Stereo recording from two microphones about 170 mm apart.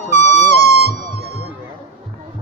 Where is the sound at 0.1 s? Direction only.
40° left (ahead or behind).